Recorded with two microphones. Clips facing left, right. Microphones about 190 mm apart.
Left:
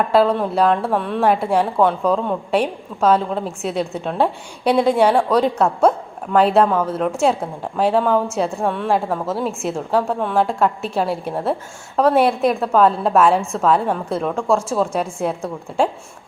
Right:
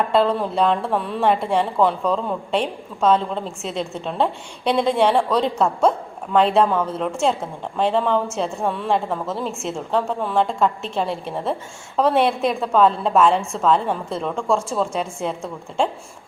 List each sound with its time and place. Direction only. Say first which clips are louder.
0.1 s a woman's voice: left 3 dB; 5° left (ahead or behind)